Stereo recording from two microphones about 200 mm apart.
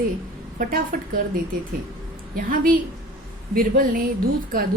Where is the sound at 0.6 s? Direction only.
45° right (ahead or behind).